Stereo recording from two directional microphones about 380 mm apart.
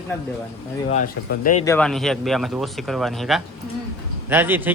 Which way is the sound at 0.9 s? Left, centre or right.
Left.